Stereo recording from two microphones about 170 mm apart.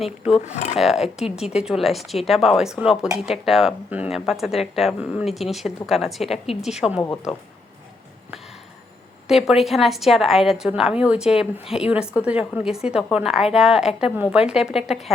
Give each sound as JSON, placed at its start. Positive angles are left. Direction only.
{"t": 0.0, "sound": "speech", "side_deg": -5}
{"t": 0.4, "sound": "speech", "side_deg": 45}
{"t": 0.8, "sound": "speech", "side_deg": 0}
{"t": 9.2, "sound": "speech", "side_deg": 0}